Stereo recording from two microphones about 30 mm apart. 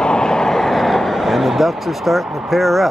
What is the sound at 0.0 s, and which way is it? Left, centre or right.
Vehicle, left.